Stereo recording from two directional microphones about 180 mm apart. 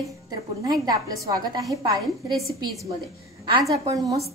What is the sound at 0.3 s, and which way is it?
A woman's voice, 20° right (ahead or behind).